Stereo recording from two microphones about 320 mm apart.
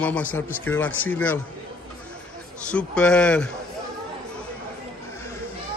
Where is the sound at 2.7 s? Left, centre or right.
Centre.